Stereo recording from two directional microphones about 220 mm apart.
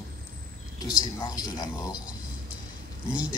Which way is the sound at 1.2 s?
20° left (ahead or behind).